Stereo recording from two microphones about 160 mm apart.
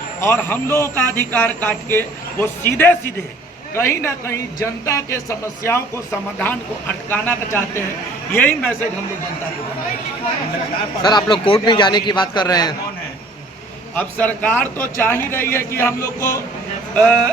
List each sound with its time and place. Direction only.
0.2 s speech: 15° left (ahead or behind)
11.0 s a man's voice: 30° left (ahead or behind)
13.9 s speech: 10° left (ahead or behind)
16.9 s a sound: 5° left (ahead or behind)